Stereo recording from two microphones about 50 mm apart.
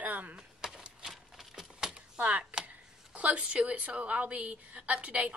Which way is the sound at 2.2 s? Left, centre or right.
Right.